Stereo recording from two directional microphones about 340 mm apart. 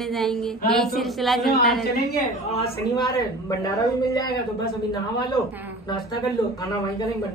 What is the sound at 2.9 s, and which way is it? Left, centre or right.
A man's voice, centre.